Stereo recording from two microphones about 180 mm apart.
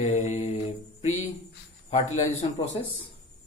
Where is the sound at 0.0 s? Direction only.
40° left (ahead or behind).